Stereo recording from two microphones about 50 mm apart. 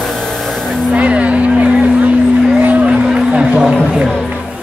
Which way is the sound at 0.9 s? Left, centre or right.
Right.